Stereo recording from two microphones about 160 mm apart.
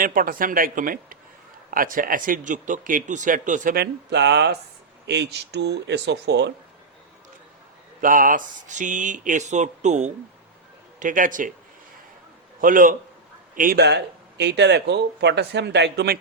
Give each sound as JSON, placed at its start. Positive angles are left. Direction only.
{"t": 0.0, "sound": "speech", "side_deg": -60}
{"t": 3.8, "sound": "speech", "side_deg": -90}
{"t": 8.0, "sound": "speech", "side_deg": -60}
{"t": 12.6, "sound": "speech", "side_deg": -60}
{"t": 13.6, "sound": "speech", "side_deg": -75}